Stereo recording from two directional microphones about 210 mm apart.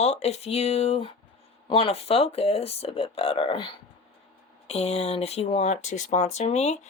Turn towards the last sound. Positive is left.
turn(degrees=30)  # may be behind; listen again after turning